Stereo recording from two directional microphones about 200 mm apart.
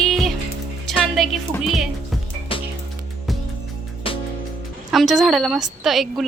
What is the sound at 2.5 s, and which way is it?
Music, 25° left (ahead or behind).